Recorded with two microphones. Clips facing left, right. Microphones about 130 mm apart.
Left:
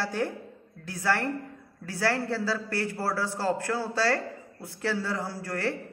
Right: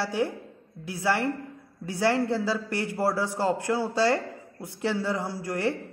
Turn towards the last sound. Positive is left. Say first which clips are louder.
# right 3 dB
turn(degrees=-15)  # may be behind; listen again after turning